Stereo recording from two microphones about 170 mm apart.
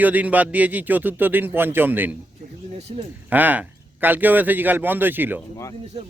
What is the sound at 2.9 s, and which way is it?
Speech, 35° right (ahead or behind).